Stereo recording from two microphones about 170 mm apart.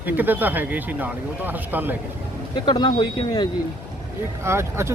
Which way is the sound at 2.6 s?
25° left (ahead or behind).